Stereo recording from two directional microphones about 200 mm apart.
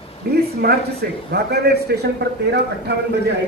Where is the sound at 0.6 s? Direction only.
50° right (ahead or behind).